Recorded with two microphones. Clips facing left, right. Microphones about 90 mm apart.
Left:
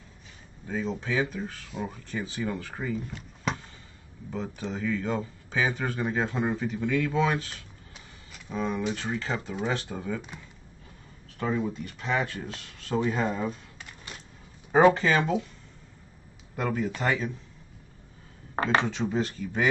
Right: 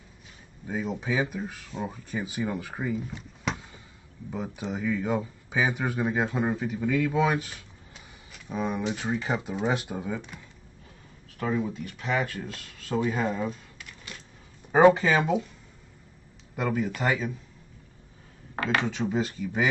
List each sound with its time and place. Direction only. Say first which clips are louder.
0.7 s speech: right 1 dB; 10° right (ahead or behind)
3.5 s a sound: left 1 dB; centre (ahead or behind)
4.3 s speech: right 1 dB; 10° right (ahead or behind)
11.3 s speech: even; centre (ahead or behind)
13.7 s a sound: even; 25° left (ahead or behind)
15.0 s speech: right 1 dB; 5° right (ahead or behind)
16.5 s speech: right 1 dB; 5° right (ahead or behind)
18.6 s speech: left 2 dB; 30° left (ahead or behind)
18.9 s speech: even; 5° right (ahead or behind)